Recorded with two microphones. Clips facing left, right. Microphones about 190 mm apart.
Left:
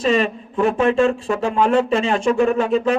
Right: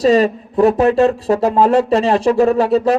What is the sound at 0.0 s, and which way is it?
A man's voice, 40° right (ahead or behind).